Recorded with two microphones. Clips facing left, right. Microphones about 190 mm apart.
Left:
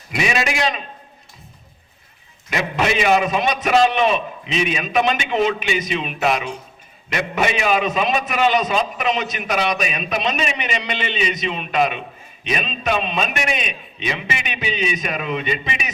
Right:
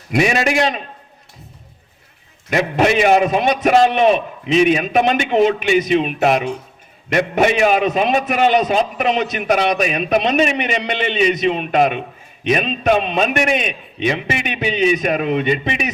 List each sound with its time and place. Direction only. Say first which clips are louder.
0.1 s a man's voice: right 6 dB; 50° right (ahead or behind)
2.5 s a man's voice: right 5 dB; 50° right (ahead or behind)